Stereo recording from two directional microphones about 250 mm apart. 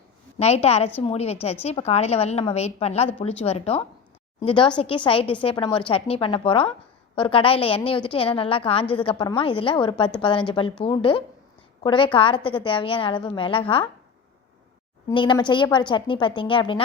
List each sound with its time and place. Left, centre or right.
0.3 s a woman's voice: left
15.1 s a woman's voice: centre